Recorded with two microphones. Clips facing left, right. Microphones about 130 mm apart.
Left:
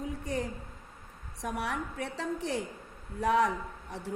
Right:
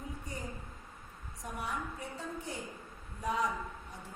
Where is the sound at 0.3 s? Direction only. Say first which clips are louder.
Left 13 dB; 80° left.